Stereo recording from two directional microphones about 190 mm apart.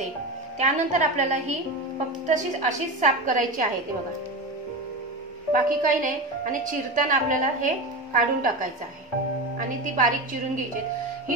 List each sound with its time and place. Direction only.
0.6 s a woman's voice: 40° right (ahead or behind)
5.5 s a woman's voice: 45° right (ahead or behind)